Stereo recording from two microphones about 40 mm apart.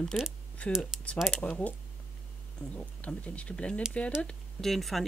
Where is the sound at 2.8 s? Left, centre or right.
Left.